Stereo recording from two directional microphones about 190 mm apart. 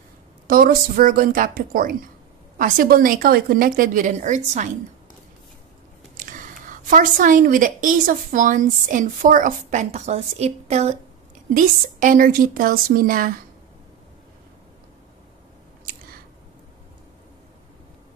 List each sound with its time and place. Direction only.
0.5 s a woman's voice: 50° right (ahead or behind)
6.1 s a woman's voice: 45° right (ahead or behind)
11.5 s a woman's voice: 45° right (ahead or behind)